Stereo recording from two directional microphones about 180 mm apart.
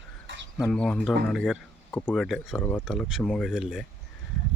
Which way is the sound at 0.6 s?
5° left (ahead or behind).